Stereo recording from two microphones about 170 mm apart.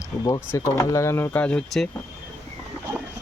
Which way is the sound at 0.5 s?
15° left (ahead or behind).